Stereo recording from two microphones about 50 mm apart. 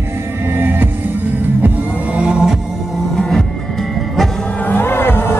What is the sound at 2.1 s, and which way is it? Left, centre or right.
Music, right.